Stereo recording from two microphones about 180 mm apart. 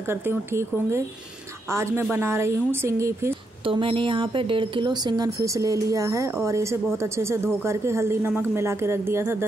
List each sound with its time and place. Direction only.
0.1 s speech: 10° right (ahead or behind)
3.6 s speech: 30° right (ahead or behind); by 9.5 s 15° right (ahead or behind)